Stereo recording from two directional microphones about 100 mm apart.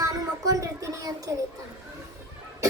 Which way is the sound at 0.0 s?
35° right (ahead or behind).